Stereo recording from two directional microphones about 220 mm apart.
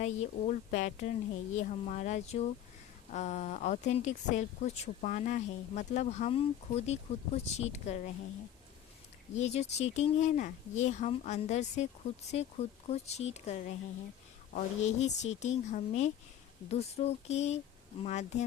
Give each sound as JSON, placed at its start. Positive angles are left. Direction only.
{"t": 0.0, "sound": "a woman's voice", "side_deg": 30}
{"t": 9.3, "sound": "a woman's voice", "side_deg": 30}